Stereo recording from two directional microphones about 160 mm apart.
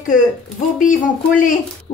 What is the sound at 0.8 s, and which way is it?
Speech, 55° left (ahead or behind).